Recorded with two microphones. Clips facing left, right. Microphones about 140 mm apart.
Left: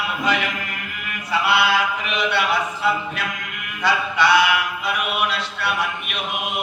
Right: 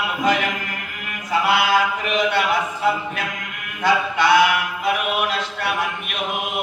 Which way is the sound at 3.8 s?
50° right (ahead or behind).